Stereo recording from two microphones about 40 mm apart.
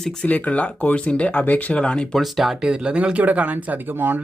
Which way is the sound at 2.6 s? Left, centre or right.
Right.